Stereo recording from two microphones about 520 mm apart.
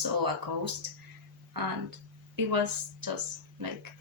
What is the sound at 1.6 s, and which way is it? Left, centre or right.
Speech, right.